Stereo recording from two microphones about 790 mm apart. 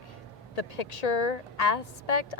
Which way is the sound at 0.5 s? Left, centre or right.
Left.